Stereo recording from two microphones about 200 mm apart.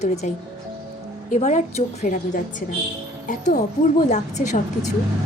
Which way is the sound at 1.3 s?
35° left (ahead or behind).